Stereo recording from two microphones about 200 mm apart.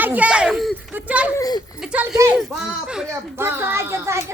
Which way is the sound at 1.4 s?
20° left (ahead or behind).